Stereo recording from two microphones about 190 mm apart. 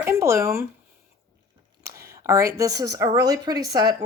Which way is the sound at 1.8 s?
15° right (ahead or behind).